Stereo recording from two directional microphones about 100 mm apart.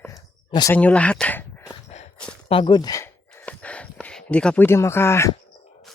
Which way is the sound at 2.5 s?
55° left (ahead or behind).